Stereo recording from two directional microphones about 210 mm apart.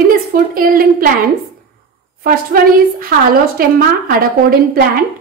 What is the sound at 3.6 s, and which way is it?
A woman's voice, 45° right (ahead or behind).